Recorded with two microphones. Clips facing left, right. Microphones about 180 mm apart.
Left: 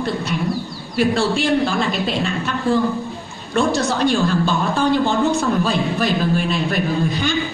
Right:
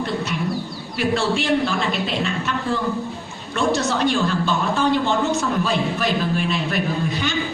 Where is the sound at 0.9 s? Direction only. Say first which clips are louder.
Left 3 dB; 35° left (ahead or behind).